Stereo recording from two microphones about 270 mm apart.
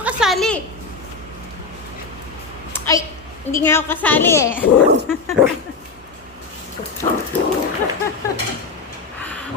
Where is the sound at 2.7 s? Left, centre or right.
Centre.